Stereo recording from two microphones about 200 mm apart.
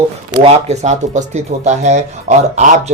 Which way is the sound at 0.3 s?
30° right (ahead or behind).